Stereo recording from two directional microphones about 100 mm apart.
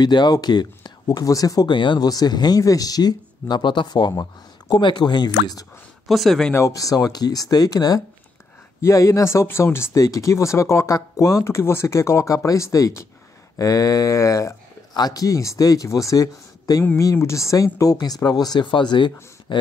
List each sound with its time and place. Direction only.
0.0 s speech: 45° left (ahead or behind)
1.7 s speech: 50° left (ahead or behind)
6.0 s speech: centre (ahead or behind)
6.5 s speech: 30° left (ahead or behind); by 19.6 s 50° left (ahead or behind)